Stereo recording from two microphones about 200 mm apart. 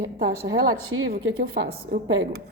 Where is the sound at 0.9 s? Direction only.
70° right (ahead or behind).